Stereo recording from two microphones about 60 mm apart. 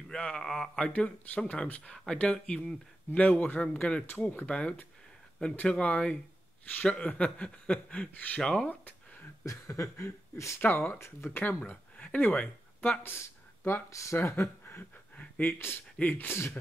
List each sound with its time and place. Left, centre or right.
0.1 s speech: centre
0.9 s speech: left
3.2 s speech: left
4.0 s speech: left
8.4 s speech: centre
8.6 s a sound: left
9.7 s speech: left
10.9 s speech: left
11.4 s speech: left
13.0 s speech: left
14.6 s a sound: left
16.0 s speech: left
16.3 s speech: left